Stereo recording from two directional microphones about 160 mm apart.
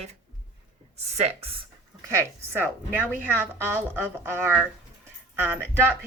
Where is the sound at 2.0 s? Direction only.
20° right (ahead or behind).